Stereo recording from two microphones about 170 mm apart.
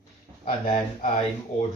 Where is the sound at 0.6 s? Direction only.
35° left (ahead or behind).